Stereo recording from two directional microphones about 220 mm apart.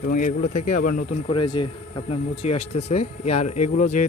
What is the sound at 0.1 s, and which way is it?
Speech, 35° left (ahead or behind).